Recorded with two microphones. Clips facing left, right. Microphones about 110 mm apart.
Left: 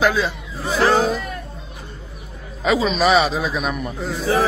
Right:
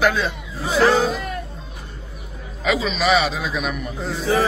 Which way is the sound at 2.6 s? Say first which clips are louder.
Left 3 dB; 40° left (ahead or behind).